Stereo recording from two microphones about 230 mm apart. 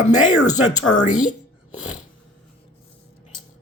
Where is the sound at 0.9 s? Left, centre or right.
Left.